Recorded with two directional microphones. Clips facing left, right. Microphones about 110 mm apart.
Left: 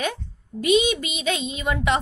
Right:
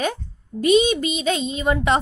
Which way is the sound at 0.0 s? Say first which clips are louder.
Right 3 dB; 40° right (ahead or behind).